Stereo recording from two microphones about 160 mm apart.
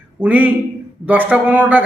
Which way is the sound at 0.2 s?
10° right (ahead or behind).